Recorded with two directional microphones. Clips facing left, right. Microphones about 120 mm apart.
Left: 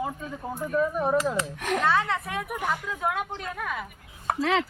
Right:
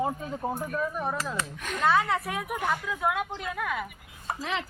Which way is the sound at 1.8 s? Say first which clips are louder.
Right 3 dB; 20° right (ahead or behind).